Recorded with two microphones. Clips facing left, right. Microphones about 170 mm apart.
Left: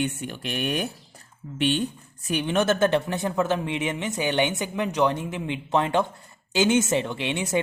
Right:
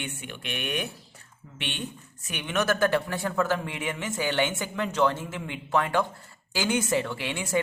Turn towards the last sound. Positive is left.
turn(degrees=20)  # may be behind; listen again after turning